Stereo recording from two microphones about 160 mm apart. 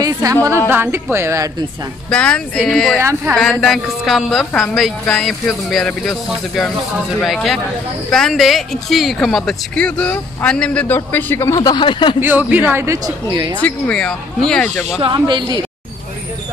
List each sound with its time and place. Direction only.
0.0 s a woman's voice: 20° right (ahead or behind)
2.0 s a woman's voice: 5° left (ahead or behind)
3.0 s speech: 15° right (ahead or behind)
3.3 s a woman's voice: centre (ahead or behind); by 12.2 s 30° left (ahead or behind)
12.2 s speech: 10° right (ahead or behind)
13.6 s speech: 10° left (ahead or behind)
15.0 s speech: 30° right (ahead or behind)